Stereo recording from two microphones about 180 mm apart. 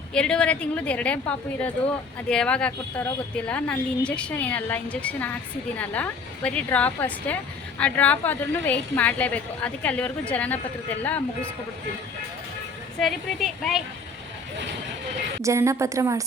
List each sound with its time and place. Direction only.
0.1 s a woman's voice: 5° left (ahead or behind)
13.0 s a woman's voice: centre (ahead or behind)
15.4 s a woman's voice: 15° right (ahead or behind)